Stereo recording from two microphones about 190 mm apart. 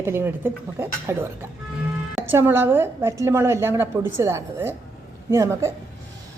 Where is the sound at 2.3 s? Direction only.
10° right (ahead or behind).